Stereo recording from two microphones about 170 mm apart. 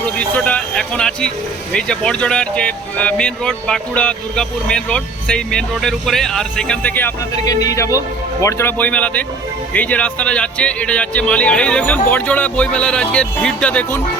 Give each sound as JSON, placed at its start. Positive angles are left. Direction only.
{"t": 0.0, "sound": "speech", "side_deg": 10}